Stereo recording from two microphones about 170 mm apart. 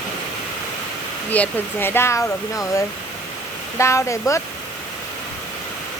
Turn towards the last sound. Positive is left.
turn(degrees=15)  # may be behind; listen again after turning